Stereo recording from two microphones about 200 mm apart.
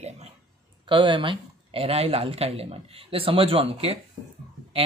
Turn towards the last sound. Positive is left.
turn(degrees=-30)  # may be behind; listen again after turning